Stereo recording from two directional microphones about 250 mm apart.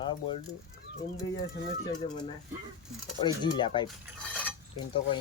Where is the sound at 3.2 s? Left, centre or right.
Centre.